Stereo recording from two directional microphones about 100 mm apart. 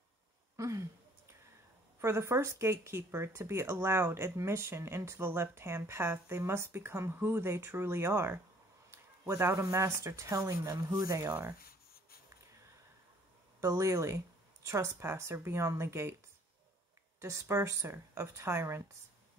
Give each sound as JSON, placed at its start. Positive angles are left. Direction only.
{"t": 0.6, "sound": "speech", "side_deg": -30}
{"t": 2.0, "sound": "speech", "side_deg": -25}
{"t": 13.6, "sound": "speech", "side_deg": -30}
{"t": 17.2, "sound": "speech", "side_deg": -30}